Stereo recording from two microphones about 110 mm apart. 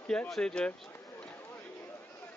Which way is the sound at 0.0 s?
10° left (ahead or behind).